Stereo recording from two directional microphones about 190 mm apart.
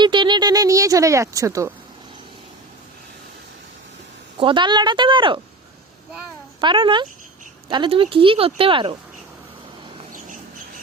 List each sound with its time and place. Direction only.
0.0 s speech: 25° right (ahead or behind)
4.4 s speech: 25° right (ahead or behind)
6.6 s speech: 25° right (ahead or behind)